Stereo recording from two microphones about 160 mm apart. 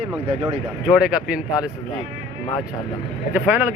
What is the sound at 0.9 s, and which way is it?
Speech, 5° right (ahead or behind).